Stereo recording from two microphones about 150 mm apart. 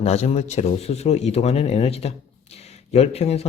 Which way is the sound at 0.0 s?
45° left (ahead or behind).